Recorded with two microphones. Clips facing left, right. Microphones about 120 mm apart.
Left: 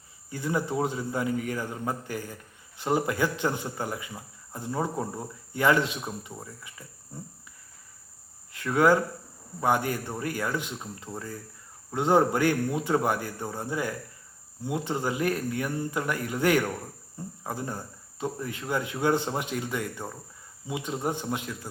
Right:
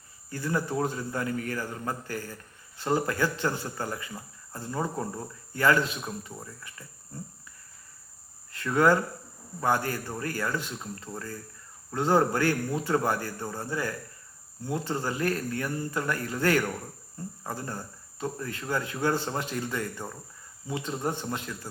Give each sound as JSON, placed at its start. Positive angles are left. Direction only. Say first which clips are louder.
{"t": 0.3, "sound": "a man's voice", "louder": "left 1 dB", "side_deg": 15}
{"t": 8.5, "sound": "a man's voice", "louder": "left 1 dB", "side_deg": 10}